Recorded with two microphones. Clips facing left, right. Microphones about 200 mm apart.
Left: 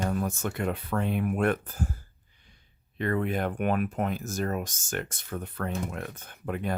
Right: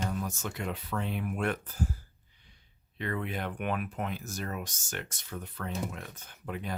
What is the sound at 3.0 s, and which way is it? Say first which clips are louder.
Speech: left 7 dB; 50° left (ahead or behind).